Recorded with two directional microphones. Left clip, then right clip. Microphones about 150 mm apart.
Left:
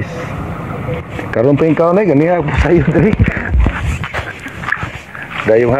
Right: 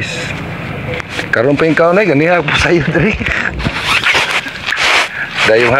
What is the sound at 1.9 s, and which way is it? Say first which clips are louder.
Speech: right 1 dB; 55° left (ahead or behind).